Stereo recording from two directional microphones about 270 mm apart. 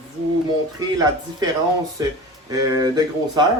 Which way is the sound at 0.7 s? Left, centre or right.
Centre.